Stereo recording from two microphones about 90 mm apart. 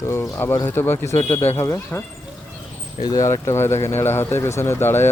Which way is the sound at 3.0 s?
35° left (ahead or behind).